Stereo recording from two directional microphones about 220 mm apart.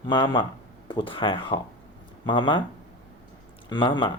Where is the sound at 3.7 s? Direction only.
20° left (ahead or behind).